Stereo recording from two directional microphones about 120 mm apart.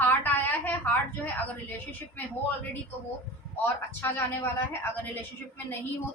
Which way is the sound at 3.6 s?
20° left (ahead or behind).